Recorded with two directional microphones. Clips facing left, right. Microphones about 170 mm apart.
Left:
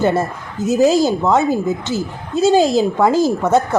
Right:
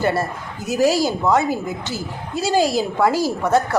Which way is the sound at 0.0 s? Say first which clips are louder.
Left 4 dB; 20° left (ahead or behind).